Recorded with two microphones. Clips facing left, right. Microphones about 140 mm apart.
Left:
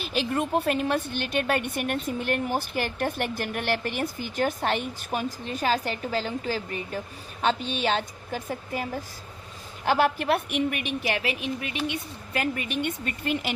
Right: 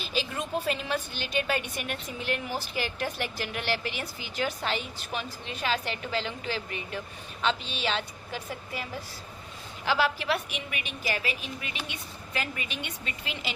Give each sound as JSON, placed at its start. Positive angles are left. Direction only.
{"t": 0.0, "sound": "a woman's voice", "side_deg": 60}